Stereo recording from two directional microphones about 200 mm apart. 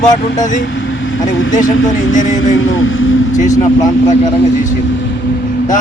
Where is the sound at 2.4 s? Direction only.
80° left.